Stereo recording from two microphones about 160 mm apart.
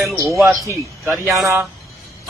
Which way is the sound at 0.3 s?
Centre (ahead or behind).